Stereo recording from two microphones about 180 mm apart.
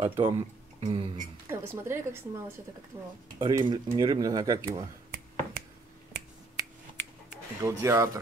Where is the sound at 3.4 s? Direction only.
25° right (ahead or behind).